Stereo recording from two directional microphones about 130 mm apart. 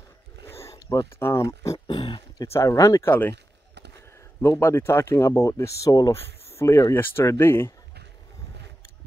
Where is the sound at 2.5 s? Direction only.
25° left (ahead or behind).